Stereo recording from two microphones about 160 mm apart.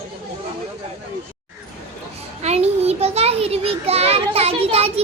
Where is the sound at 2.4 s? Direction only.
45° right (ahead or behind).